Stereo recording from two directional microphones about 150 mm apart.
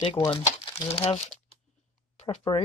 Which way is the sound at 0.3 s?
45° left (ahead or behind).